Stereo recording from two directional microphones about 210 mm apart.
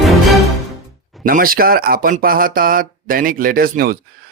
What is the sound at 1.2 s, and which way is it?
Speech, 45° right (ahead or behind).